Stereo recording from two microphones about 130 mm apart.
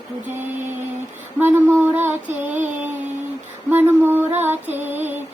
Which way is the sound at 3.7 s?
15° right (ahead or behind).